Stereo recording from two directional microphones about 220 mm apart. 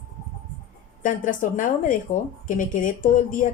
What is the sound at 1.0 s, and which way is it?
Speech, 35° left (ahead or behind).